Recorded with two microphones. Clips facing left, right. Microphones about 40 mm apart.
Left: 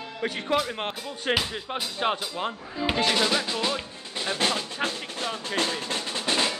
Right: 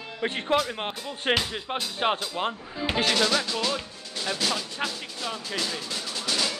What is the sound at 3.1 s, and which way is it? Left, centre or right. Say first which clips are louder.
Drum: even; centre.